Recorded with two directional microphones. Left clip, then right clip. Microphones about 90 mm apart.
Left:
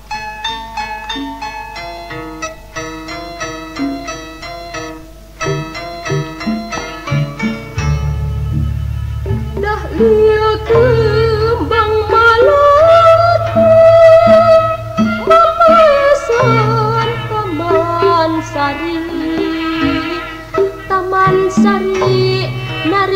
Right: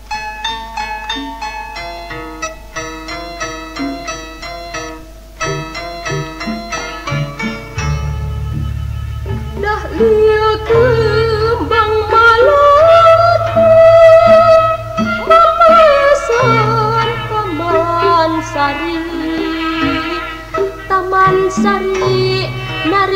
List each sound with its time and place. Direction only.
0.1 s music: 15° left (ahead or behind)
3.3 s music: 25° left (ahead or behind)
6.0 s music: 25° left (ahead or behind)
9.6 s music: 10° left (ahead or behind)
10.1 s humming: 30° left (ahead or behind)
17.3 s music: 30° left (ahead or behind)
18.8 s music: 15° left (ahead or behind)